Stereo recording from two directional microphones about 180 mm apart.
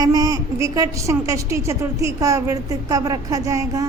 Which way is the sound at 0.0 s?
20° right (ahead or behind).